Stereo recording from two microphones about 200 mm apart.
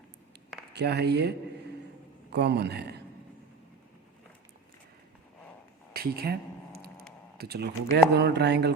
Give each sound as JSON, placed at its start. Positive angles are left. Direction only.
{"t": 0.7, "sound": "speech", "side_deg": -55}
{"t": 5.9, "sound": "speech", "side_deg": -50}
{"t": 7.3, "sound": "speech", "side_deg": -55}